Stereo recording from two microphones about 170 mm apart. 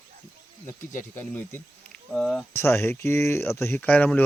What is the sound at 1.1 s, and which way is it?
Speech, 15° left (ahead or behind).